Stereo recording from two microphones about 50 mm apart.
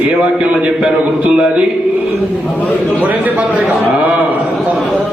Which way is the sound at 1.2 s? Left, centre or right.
Centre.